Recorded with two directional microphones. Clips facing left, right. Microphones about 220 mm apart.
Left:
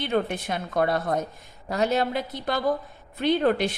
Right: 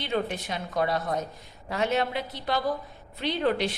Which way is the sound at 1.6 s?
40° left (ahead or behind).